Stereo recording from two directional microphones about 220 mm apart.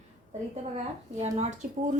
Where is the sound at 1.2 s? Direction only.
30° right (ahead or behind).